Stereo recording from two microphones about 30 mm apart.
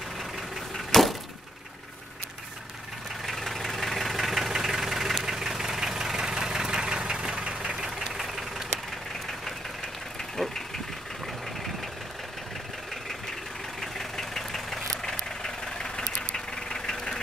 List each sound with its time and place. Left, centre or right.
0.7 s a sound: centre
3.3 s engine: centre
4.5 s vehicle: centre
8.1 s vehicle: centre
13.7 s vehicle: centre